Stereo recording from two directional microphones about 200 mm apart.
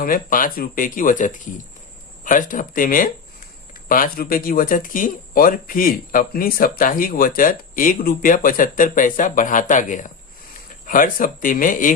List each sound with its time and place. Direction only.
0.0 s speech: 45° left (ahead or behind)